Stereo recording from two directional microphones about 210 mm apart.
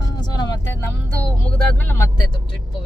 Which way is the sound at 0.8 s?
10° left (ahead or behind).